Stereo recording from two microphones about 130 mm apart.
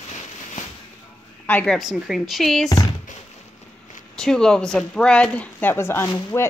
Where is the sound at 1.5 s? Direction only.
10° left (ahead or behind).